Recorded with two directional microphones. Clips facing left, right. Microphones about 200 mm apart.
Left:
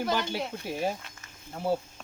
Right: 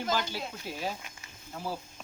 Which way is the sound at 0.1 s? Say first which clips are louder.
Left 3 dB; 65° left (ahead or behind).